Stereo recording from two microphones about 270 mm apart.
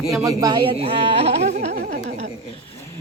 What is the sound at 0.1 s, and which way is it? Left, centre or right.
Speech, centre.